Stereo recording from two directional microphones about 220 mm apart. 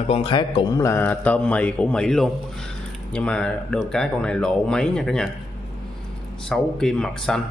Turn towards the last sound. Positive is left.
turn(degrees=5)  # may be behind; listen again after turning